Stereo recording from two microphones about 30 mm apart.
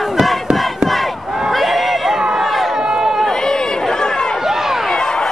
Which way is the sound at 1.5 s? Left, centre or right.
Centre.